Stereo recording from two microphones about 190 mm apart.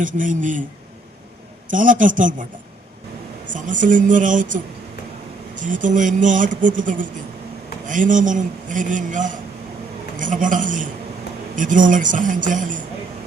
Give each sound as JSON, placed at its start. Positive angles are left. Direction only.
{"t": 0.0, "sound": "a man's voice", "side_deg": -45}
{"t": 1.6, "sound": "a man's voice", "side_deg": -45}
{"t": 3.5, "sound": "a man's voice", "side_deg": -45}